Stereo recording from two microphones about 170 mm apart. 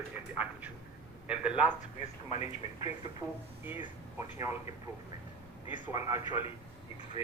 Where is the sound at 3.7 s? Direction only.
15° right (ahead or behind).